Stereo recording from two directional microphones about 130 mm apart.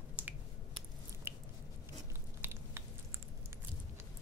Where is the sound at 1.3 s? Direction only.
15° right (ahead or behind).